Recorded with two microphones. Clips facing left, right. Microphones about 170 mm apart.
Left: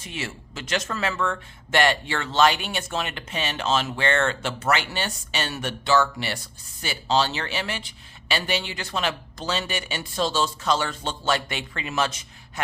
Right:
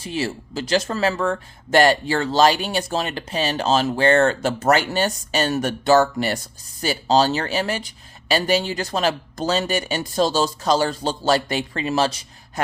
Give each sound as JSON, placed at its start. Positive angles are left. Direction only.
{"t": 0.0, "sound": "speech", "side_deg": -35}